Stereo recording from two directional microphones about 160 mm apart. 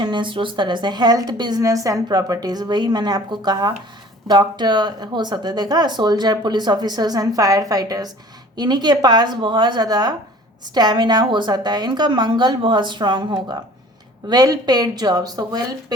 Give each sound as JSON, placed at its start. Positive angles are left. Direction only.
{"t": 0.0, "sound": "speech", "side_deg": -30}